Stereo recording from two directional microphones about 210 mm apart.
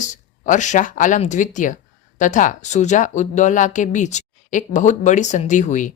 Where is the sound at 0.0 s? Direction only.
35° left (ahead or behind).